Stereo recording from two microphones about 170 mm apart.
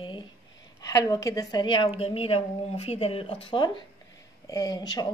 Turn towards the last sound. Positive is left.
turn(degrees=25)  # may be behind; listen again after turning